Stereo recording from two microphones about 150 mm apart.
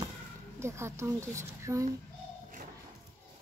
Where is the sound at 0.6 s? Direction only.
20° right (ahead or behind).